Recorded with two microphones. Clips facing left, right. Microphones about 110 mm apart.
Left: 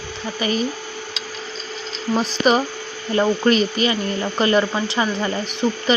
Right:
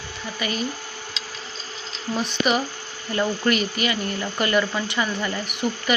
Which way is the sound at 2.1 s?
35° left (ahead or behind).